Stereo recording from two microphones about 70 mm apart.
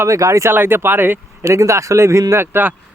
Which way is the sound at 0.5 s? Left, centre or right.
Right.